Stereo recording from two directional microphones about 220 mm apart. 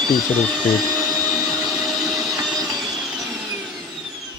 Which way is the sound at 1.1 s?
Centre (ahead or behind).